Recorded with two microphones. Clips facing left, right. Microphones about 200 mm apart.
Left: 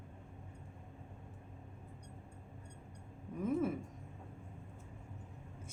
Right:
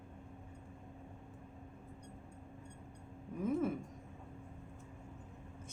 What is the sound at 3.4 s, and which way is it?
Speech, centre (ahead or behind).